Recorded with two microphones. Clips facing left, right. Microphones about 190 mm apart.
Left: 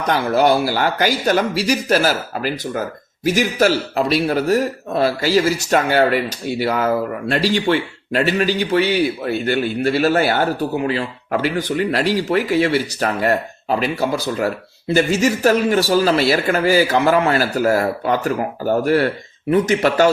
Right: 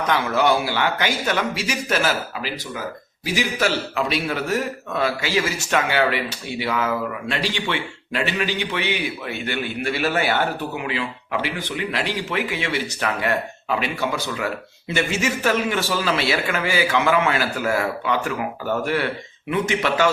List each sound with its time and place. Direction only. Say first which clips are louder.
0.1 s a man's voice: left 5 dB; 40° left (ahead or behind)